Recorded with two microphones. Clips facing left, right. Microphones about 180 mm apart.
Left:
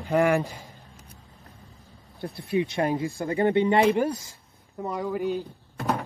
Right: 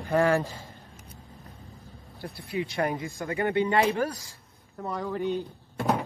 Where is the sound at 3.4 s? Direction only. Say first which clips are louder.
Left 4 dB; 20° left (ahead or behind).